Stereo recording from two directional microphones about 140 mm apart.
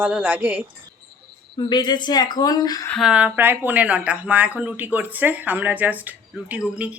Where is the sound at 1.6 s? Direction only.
30° left (ahead or behind).